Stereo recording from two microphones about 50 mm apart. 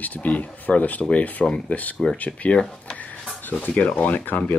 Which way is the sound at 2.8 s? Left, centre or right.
Left.